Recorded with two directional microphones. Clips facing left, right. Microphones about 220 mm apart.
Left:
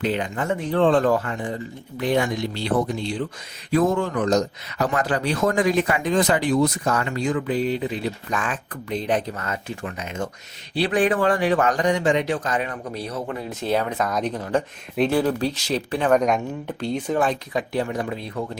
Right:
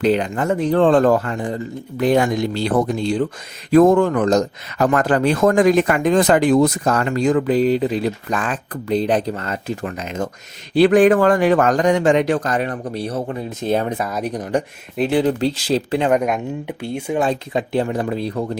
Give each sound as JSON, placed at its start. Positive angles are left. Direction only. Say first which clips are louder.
{"t": 0.0, "sound": "a man's voice", "louder": "right 7 dB", "side_deg": -40}
{"t": 10.8, "sound": "a man's voice", "louder": "right 8 dB", "side_deg": -45}
{"t": 13.9, "sound": "speech", "louder": "right 1 dB", "side_deg": -10}
{"t": 16.1, "sound": "speech", "louder": "right 1 dB", "side_deg": -10}
{"t": 17.2, "sound": "speech", "louder": "right 6 dB", "side_deg": -25}